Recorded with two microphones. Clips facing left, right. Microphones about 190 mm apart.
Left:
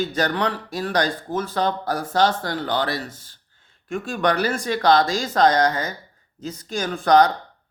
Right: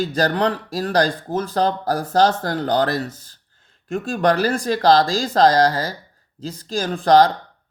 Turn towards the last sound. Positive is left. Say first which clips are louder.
# right 2 dB
turn(degrees=-30)  # may be behind; listen again after turning